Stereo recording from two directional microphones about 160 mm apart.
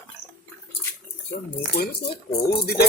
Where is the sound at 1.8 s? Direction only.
80° left.